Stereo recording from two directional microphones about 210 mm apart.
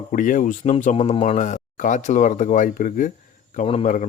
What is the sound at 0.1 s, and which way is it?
Speech, 40° left (ahead or behind).